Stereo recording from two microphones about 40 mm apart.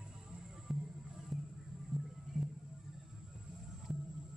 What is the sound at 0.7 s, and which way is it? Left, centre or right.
Music, centre.